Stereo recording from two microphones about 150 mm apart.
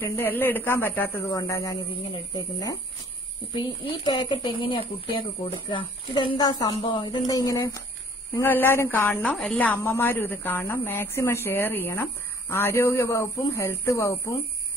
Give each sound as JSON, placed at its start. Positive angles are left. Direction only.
{"t": 0.0, "sound": "a woman's voice", "side_deg": 15}
{"t": 1.3, "sound": "a woman's voice", "side_deg": 25}
{"t": 9.3, "sound": "a woman's voice", "side_deg": 0}
{"t": 9.6, "sound": "a woman's voice", "side_deg": 10}